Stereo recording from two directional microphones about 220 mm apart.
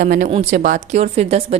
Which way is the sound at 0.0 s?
35° right (ahead or behind).